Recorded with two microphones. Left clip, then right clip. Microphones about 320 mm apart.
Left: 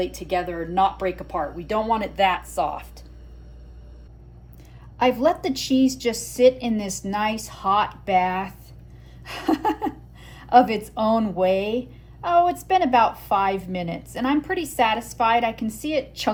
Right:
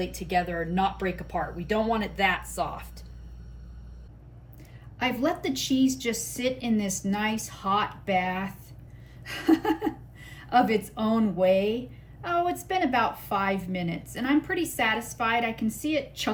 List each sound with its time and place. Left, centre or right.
0.0 s a woman's voice: centre
4.9 s a woman's voice: centre